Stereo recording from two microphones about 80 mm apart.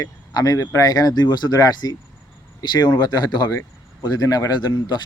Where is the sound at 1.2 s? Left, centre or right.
Left.